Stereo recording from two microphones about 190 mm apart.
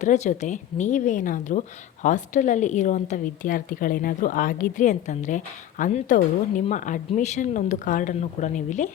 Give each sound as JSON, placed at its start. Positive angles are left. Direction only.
{"t": 0.0, "sound": "a woman's voice", "side_deg": 40}